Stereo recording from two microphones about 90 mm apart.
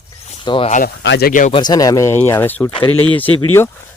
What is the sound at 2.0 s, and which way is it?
Speech, 25° left (ahead or behind).